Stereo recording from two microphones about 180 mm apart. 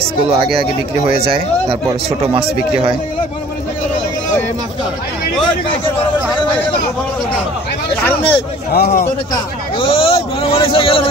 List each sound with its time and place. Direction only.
0.0 s speech: 30° right (ahead or behind)
8.7 s a man's voice: 60° left (ahead or behind)
9.3 s a man's voice: 30° left (ahead or behind)